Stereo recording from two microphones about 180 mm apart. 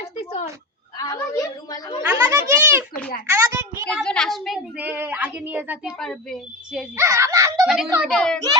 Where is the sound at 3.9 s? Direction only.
5° left (ahead or behind).